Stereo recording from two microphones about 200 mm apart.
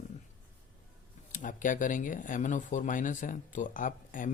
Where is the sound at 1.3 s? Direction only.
40° left (ahead or behind).